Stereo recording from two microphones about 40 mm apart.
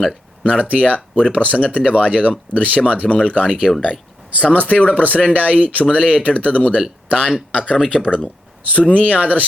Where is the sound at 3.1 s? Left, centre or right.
Left.